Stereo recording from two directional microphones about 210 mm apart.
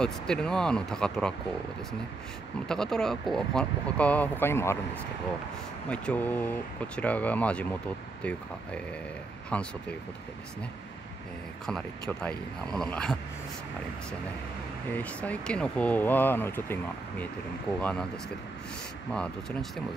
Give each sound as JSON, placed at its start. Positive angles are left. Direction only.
{"t": 0.0, "sound": "speech", "side_deg": 5}
{"t": 2.7, "sound": "speech", "side_deg": 5}
{"t": 5.9, "sound": "speech", "side_deg": 5}
{"t": 11.6, "sound": "speech", "side_deg": 5}
{"t": 14.9, "sound": "speech", "side_deg": 10}
{"t": 19.1, "sound": "speech", "side_deg": 5}